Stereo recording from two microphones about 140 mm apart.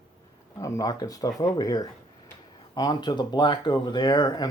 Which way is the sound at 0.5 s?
25° left (ahead or behind).